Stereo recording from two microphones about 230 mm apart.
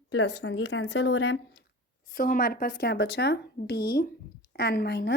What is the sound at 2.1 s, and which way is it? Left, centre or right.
A woman's voice, left.